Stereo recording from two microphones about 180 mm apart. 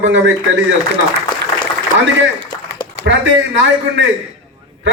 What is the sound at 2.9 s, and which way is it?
A man's voice, 85° right.